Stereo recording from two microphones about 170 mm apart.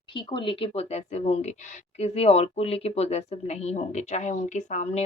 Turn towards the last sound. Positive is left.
turn(degrees=45)  # may be behind; listen again after turning